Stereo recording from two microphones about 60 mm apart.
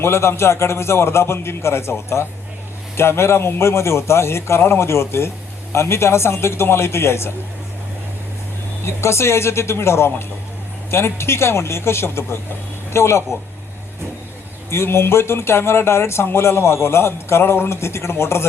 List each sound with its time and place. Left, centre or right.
0.0 s speech: left
8.8 s speech: left
14.7 s speech: left